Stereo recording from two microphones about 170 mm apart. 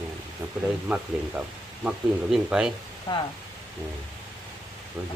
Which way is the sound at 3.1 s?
25° left (ahead or behind).